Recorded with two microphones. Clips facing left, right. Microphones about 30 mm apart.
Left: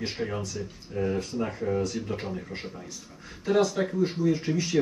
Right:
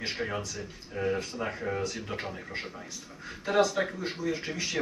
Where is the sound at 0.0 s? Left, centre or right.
Right.